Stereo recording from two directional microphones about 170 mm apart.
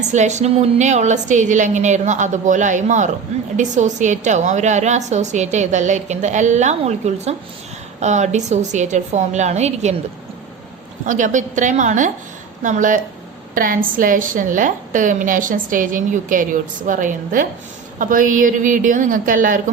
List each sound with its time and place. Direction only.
0.0 s a woman's voice: 45° right (ahead or behind)
11.0 s a woman's voice: 50° right (ahead or behind)